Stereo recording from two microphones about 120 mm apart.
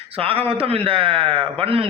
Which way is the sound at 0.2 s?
50° right (ahead or behind).